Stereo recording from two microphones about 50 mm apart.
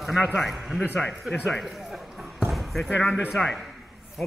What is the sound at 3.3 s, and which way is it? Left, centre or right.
Speech, centre.